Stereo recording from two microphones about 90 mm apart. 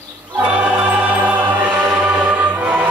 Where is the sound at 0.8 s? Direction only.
15° right (ahead or behind).